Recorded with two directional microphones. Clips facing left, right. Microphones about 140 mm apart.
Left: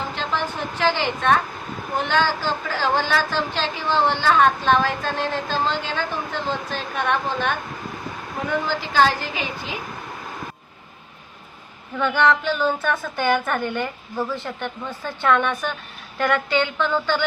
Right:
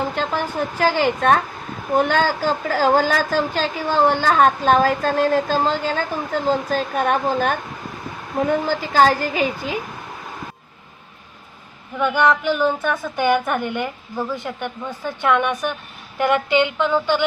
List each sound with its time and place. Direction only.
0.1 s a woman's voice: 45° right (ahead or behind)
11.9 s a woman's voice: 10° right (ahead or behind)